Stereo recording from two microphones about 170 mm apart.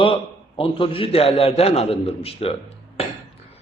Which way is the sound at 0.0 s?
30° left (ahead or behind).